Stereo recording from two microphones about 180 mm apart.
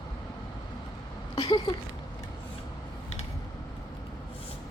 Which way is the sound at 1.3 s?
20° left (ahead or behind).